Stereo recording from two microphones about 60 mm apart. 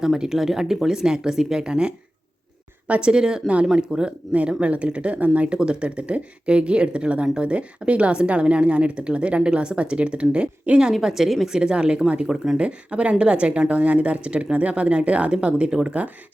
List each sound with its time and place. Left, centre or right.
0.0 s speech: centre